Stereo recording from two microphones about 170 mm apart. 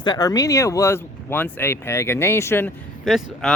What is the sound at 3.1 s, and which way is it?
Speech, centre (ahead or behind).